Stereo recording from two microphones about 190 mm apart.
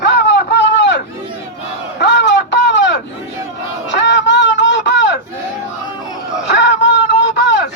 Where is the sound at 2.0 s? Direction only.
70° left (ahead or behind).